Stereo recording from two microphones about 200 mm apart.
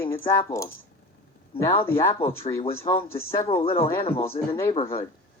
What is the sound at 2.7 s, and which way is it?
Speech, 15° left (ahead or behind).